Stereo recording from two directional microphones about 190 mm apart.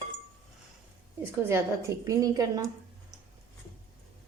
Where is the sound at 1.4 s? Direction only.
15° right (ahead or behind).